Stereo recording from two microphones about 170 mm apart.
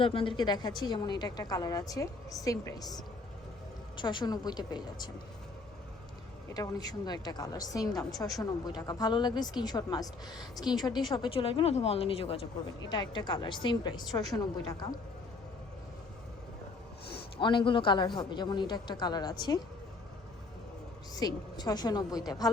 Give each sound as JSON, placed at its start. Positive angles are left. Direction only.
{"t": 0.0, "sound": "a woman's voice", "side_deg": 30}
{"t": 6.5, "sound": "a woman's voice", "side_deg": 20}
{"t": 17.1, "sound": "a sound", "side_deg": 70}
{"t": 17.4, "sound": "a woman's voice", "side_deg": 30}
{"t": 21.2, "sound": "a woman's voice", "side_deg": 25}